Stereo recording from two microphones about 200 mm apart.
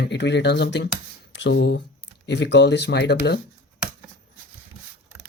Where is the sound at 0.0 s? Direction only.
60° left (ahead or behind).